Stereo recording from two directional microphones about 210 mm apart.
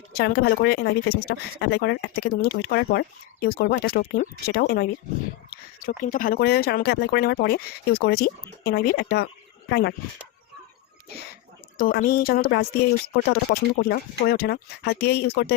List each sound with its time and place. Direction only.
0.1 s speech: 50° left (ahead or behind)
11.8 s speech: 45° left (ahead or behind)